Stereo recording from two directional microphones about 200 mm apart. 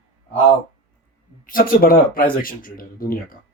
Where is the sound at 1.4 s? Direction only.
45° left (ahead or behind).